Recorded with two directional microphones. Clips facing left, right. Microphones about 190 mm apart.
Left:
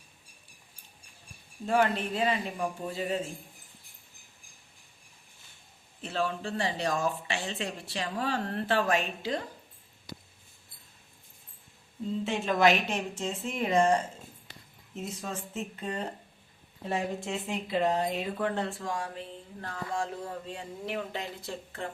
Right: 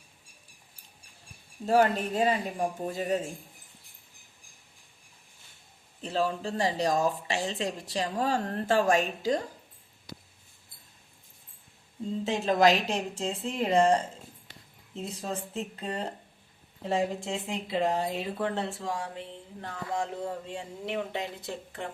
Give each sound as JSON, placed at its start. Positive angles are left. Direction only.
{"t": 1.6, "sound": "speech", "side_deg": -40}
{"t": 6.0, "sound": "speech", "side_deg": -35}
{"t": 12.2, "sound": "speech", "side_deg": -35}
{"t": 17.2, "sound": "speech", "side_deg": -25}